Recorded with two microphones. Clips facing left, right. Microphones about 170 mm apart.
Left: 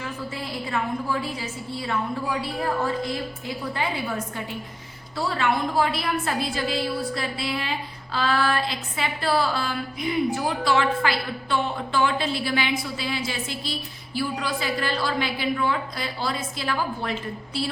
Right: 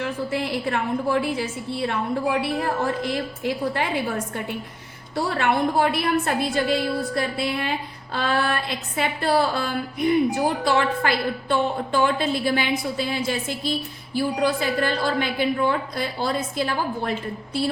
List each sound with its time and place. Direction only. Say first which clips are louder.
0.0 s a woman's voice: right 7 dB; 70° right (ahead or behind); by 17.7 s 50° right (ahead or behind)